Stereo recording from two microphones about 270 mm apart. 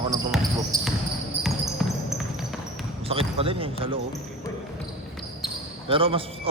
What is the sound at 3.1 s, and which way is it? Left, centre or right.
Speech, right.